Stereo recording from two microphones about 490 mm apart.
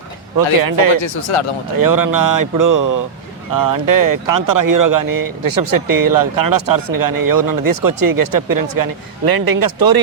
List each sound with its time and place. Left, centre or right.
0.3 s speech: right
1.0 s speech: left
1.7 s speech: right